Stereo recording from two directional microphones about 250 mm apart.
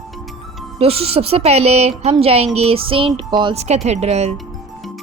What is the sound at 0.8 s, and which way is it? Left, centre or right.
Speech, right.